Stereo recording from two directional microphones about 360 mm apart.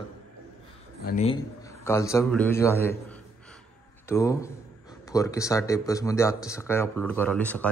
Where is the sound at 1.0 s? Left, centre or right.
Centre.